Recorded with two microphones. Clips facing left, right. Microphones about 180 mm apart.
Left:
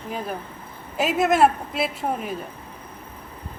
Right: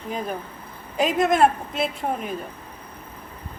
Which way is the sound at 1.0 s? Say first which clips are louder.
Even; 5° left (ahead or behind).